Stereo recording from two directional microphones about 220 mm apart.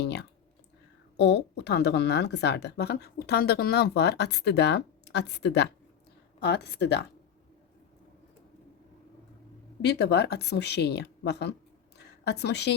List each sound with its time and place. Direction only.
0.0 s clicking: 50° left (ahead or behind)
1.1 s a woman's voice: 50° left (ahead or behind)
9.8 s a woman's voice: 50° left (ahead or behind)
11.9 s a sound: 50° left (ahead or behind)